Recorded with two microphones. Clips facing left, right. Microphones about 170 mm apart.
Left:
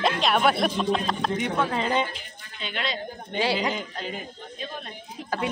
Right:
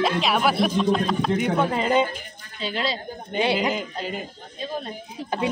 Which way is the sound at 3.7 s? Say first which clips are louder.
Right 3 dB; 5° right (ahead or behind).